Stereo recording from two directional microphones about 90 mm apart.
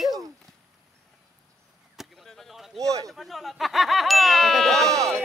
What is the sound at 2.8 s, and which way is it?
Speech, 40° right (ahead or behind).